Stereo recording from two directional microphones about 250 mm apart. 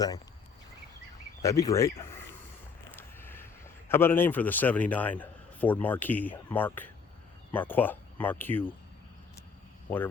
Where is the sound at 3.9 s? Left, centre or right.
Centre.